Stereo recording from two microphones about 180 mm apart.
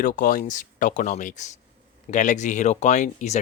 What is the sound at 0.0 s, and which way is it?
Speech, 50° left (ahead or behind).